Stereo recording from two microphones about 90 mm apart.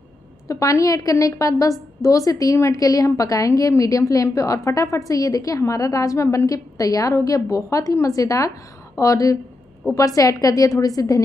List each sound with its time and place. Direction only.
0.5 s a woman's voice: 40° left (ahead or behind)